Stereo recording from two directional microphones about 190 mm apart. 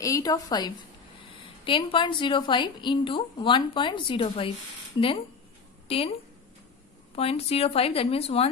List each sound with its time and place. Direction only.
0.0 s a woman's voice: 20° left (ahead or behind)
7.2 s speech: 30° left (ahead or behind)